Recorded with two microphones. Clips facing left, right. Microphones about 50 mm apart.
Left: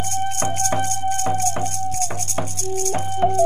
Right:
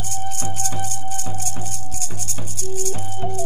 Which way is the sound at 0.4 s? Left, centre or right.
Left.